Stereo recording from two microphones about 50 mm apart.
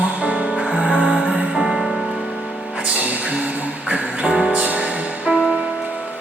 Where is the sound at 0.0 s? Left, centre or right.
Right.